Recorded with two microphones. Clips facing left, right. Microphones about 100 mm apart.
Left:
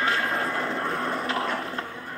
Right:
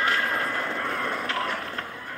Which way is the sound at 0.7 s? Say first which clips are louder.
Left 1 dB; 30° left (ahead or behind).